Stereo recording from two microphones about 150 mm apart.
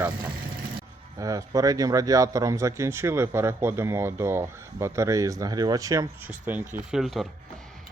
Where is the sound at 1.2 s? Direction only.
25° right (ahead or behind).